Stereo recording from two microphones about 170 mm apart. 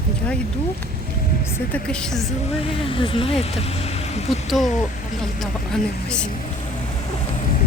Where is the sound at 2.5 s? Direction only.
35° left (ahead or behind).